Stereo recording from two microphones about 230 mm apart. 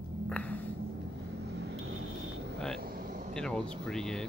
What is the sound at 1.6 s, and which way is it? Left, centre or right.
Vehicle, right.